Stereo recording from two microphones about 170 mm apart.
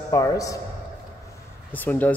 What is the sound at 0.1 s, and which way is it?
Speech, 20° left (ahead or behind).